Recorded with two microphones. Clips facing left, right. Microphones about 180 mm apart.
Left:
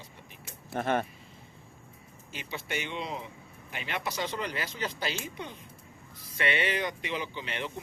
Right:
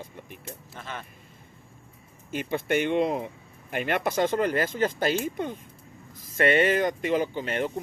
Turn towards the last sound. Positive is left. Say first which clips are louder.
# right 9 dB
turn(degrees=-45)  # may be behind; listen again after turning